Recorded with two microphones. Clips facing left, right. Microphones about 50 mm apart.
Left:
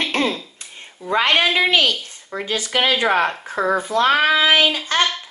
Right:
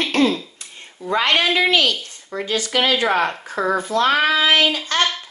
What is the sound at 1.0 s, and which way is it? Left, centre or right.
A woman's voice, left.